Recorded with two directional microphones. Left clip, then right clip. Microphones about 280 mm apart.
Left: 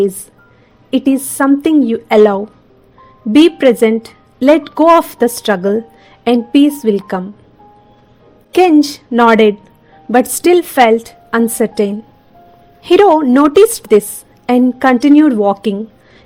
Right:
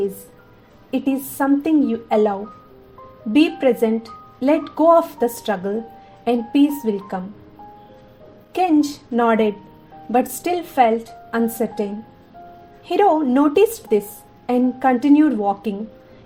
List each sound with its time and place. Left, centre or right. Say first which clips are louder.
0.9 s a woman's voice: left 8 dB; left
8.5 s a woman's voice: left 9 dB; left